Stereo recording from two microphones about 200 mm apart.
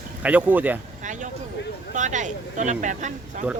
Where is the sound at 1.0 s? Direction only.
40° right (ahead or behind).